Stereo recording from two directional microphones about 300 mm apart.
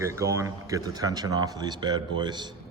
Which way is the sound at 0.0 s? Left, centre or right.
Centre.